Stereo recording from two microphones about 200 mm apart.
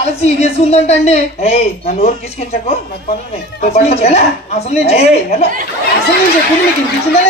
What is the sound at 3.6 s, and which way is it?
A man's voice, 30° left (ahead or behind).